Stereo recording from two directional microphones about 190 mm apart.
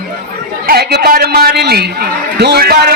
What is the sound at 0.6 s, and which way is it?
A man's voice, 55° right (ahead or behind).